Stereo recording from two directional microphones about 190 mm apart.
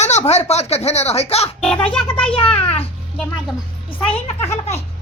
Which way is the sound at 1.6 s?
5° left (ahead or behind).